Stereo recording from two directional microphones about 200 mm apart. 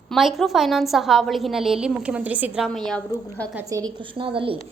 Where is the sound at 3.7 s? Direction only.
20° right (ahead or behind).